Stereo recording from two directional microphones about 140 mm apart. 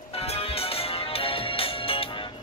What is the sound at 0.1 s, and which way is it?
Music, 45° left (ahead or behind).